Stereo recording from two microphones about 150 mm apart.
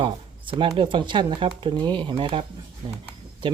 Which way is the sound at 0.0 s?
35° right (ahead or behind).